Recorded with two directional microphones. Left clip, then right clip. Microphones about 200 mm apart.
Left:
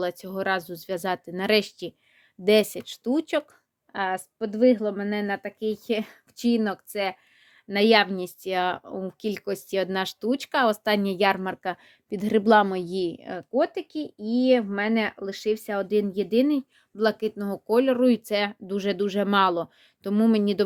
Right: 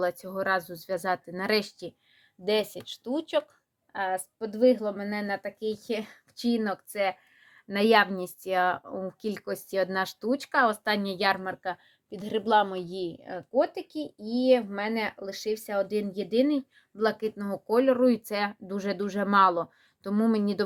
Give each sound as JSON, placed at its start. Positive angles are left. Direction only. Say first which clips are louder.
{"t": 0.0, "sound": "speech", "louder": "left 1 dB", "side_deg": 25}
{"t": 2.5, "sound": "speech", "louder": "left 7 dB", "side_deg": 60}
{"t": 3.9, "sound": "a woman's voice", "louder": "left 2 dB", "side_deg": 45}
{"t": 7.7, "sound": "speech", "louder": "left 2 dB", "side_deg": 25}
{"t": 11.5, "sound": "a woman's voice", "louder": "left 3 dB", "side_deg": 60}